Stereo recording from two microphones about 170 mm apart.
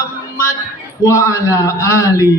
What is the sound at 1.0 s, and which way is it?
A man's voice, 20° left (ahead or behind).